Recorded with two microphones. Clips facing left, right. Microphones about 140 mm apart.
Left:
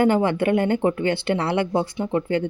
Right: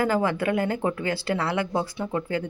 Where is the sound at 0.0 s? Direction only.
25° left (ahead or behind).